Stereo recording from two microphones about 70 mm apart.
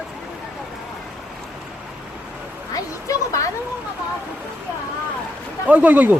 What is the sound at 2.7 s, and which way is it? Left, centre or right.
Speech, left.